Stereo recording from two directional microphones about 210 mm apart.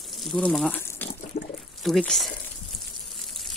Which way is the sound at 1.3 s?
45° left (ahead or behind).